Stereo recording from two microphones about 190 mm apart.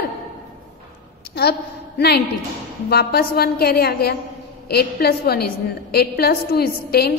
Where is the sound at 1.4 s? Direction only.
55° left (ahead or behind).